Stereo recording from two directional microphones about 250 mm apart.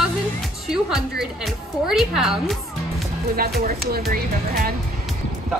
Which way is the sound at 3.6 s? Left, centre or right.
Right.